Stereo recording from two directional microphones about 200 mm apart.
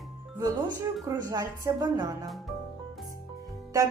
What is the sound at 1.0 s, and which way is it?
Speech, 15° right (ahead or behind).